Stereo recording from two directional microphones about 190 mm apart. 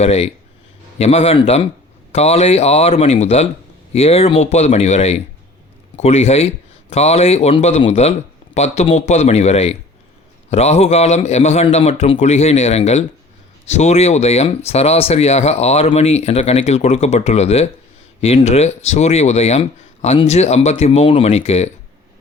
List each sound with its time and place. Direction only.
0.0 s speech: 35° left (ahead or behind)